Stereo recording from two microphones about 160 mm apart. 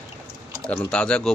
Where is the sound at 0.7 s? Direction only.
5° left (ahead or behind).